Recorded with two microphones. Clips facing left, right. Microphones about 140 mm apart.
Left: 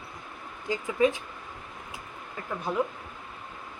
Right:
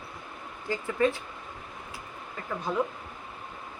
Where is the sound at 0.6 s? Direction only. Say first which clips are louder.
Left 2 dB; 15° left (ahead or behind).